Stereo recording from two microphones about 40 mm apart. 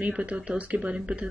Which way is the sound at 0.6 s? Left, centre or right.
Right.